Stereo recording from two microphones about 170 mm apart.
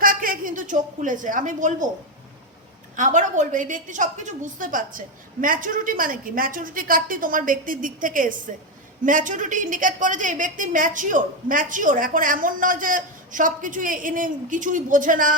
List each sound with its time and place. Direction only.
0.0 s a woman's voice: 55° right (ahead or behind)
2.9 s a woman's voice: 50° right (ahead or behind)